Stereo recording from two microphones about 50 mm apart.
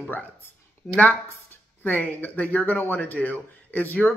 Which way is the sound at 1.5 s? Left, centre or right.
Left.